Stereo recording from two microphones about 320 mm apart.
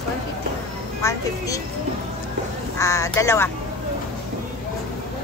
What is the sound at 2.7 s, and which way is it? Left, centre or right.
Speech, centre.